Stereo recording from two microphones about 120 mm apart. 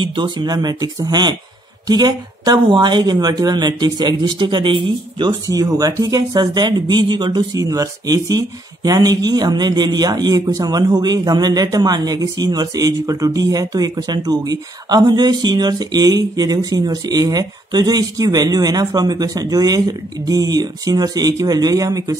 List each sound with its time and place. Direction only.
0.0 s speech: 45° right (ahead or behind)
5.5 s speech: 30° right (ahead or behind)